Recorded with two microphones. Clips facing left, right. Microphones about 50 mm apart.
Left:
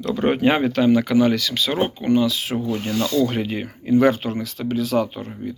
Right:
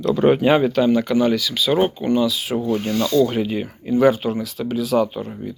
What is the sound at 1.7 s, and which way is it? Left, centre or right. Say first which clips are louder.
Speech: right 6 dB; left.